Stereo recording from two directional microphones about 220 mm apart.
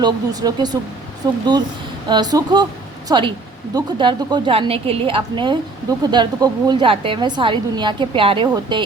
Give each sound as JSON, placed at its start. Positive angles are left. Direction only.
{"t": 0.0, "sound": "a woman's voice", "side_deg": -15}